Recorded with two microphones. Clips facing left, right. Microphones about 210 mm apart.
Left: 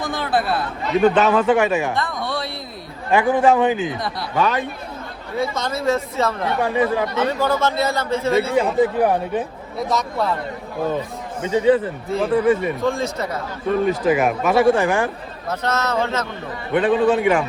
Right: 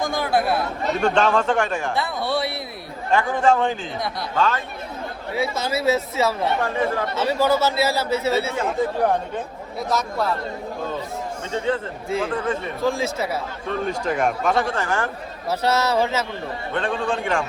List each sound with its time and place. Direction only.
0.3 s speech: centre (ahead or behind)
3.1 s speech: 10° left (ahead or behind)
5.3 s speech: 5° right (ahead or behind)
6.6 s speech: 15° left (ahead or behind)
7.3 s a man's voice: 10° right (ahead or behind)
8.5 s speech: 10° left (ahead or behind)
9.9 s speech: centre (ahead or behind)
11.4 s speech: 10° left (ahead or behind)
12.1 s speech: centre (ahead or behind)
12.4 s speech: 10° left (ahead or behind)
12.8 s speech: centre (ahead or behind)
15.4 s a man's voice: 10° right (ahead or behind)
16.7 s speech: 5° left (ahead or behind)